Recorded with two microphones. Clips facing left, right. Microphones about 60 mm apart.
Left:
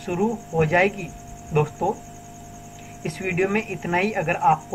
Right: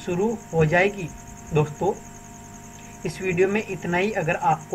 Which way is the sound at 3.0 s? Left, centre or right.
Left.